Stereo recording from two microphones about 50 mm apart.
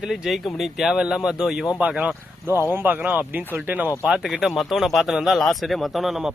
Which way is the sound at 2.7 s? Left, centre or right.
Right.